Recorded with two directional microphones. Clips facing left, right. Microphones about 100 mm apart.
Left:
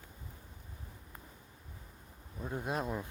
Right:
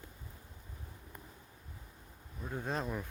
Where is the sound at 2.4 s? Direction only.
10° left (ahead or behind).